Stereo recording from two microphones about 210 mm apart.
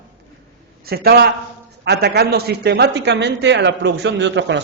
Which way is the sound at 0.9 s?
50° right (ahead or behind).